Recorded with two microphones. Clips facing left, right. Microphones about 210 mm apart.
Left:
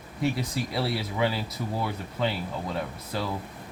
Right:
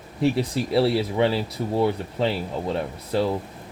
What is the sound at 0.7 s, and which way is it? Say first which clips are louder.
Speech: right 11 dB; 30° right (ahead or behind).